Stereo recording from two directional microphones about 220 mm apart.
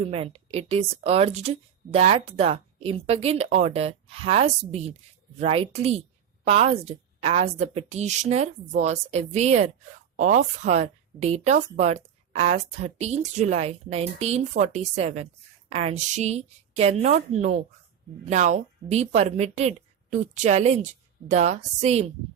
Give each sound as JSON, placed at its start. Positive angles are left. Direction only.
{"t": 0.0, "sound": "speech", "side_deg": -25}